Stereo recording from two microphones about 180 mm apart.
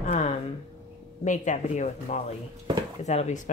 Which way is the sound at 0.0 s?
35° left (ahead or behind).